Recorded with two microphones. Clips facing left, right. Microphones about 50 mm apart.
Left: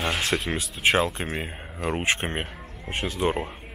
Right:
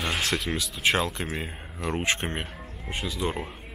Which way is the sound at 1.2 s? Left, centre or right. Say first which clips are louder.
Left 2 dB; centre.